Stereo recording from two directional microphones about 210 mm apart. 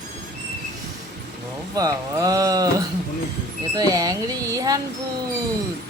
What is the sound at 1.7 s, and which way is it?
Speech, 15° right (ahead or behind).